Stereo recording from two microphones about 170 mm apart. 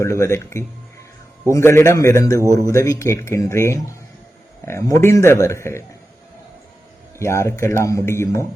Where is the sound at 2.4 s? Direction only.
15° right (ahead or behind).